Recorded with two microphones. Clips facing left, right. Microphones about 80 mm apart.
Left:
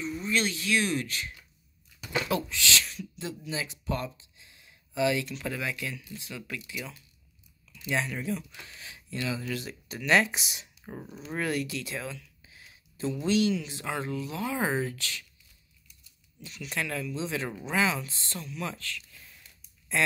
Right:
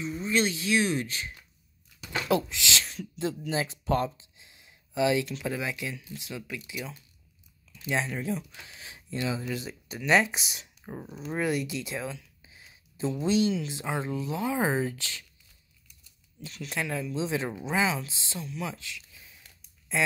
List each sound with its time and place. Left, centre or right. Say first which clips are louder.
0.0 s a sound: right 1 dB; centre
0.3 s speech: right 2 dB; right
2.2 s speech: right 6 dB; right
3.4 s speech: right 4 dB; right
4.2 s a sound: even; right
5.5 s speech: right 1 dB; centre
10.8 s speech: right 2 dB; centre
11.1 s speech: right 2 dB; centre
16.7 s speech: right 1 dB; centre